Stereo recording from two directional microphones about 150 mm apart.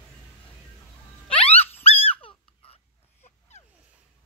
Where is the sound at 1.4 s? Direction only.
40° left (ahead or behind).